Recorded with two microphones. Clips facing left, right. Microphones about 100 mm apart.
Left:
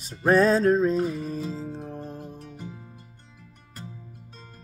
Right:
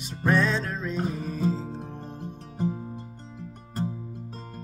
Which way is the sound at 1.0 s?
40° right (ahead or behind).